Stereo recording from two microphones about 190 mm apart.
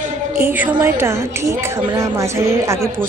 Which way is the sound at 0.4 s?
10° right (ahead or behind).